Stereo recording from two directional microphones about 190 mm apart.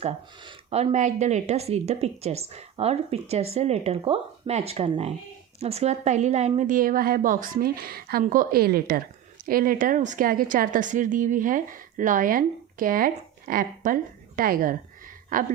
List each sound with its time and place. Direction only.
0.0 s a woman's voice: 35° right (ahead or behind)